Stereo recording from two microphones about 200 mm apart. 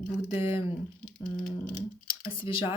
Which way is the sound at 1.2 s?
45° left (ahead or behind).